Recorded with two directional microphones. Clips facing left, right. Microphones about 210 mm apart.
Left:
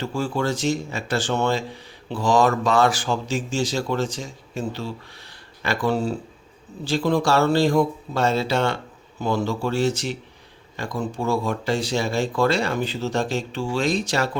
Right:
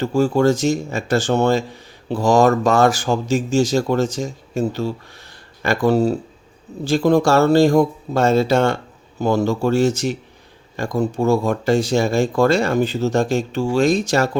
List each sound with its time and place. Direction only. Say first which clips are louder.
0.0 s speech: right 9 dB; 45° right (ahead or behind)